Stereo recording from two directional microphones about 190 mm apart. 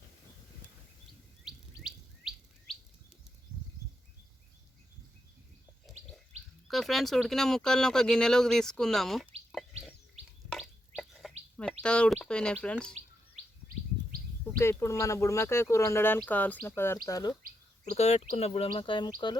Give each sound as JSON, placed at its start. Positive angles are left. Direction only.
{"t": 1.5, "sound": "bird", "side_deg": -5}
{"t": 5.9, "sound": "bird", "side_deg": 0}
{"t": 6.7, "sound": "speech", "side_deg": 0}
{"t": 10.5, "sound": "bird", "side_deg": 0}
{"t": 14.6, "sound": "speech", "side_deg": 15}
{"t": 17.9, "sound": "speech", "side_deg": 35}